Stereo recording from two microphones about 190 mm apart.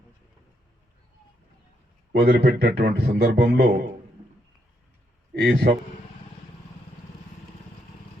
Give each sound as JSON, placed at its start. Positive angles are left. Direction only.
{"t": 2.1, "sound": "a man's voice", "side_deg": -55}
{"t": 5.3, "sound": "a man's voice", "side_deg": -60}